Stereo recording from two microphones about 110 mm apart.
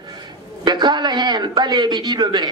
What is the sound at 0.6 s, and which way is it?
A man's voice, 40° right (ahead or behind).